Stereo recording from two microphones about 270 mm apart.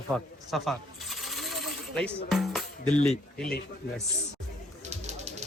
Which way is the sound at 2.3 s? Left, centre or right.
Centre.